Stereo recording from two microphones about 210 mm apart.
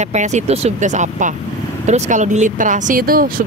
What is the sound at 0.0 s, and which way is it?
Speech, 35° right (ahead or behind).